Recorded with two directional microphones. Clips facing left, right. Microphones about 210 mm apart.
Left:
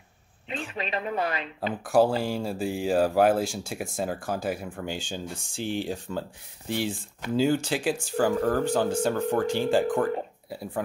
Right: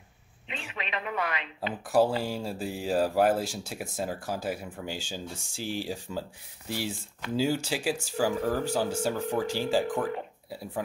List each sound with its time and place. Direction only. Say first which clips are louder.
0.5 s speech: left 5 dB; 35° left (ahead or behind)
1.9 s speech: left 3 dB; centre (ahead or behind)
7.3 s speech: left 4 dB; 5° right (ahead or behind)